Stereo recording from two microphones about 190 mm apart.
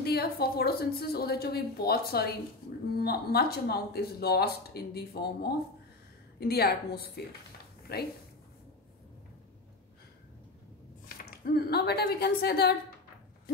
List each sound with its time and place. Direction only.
0.0 s speech: 55° left (ahead or behind)
11.2 s speech: 55° left (ahead or behind)